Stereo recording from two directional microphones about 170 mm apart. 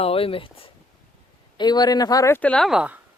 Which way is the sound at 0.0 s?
35° left (ahead or behind).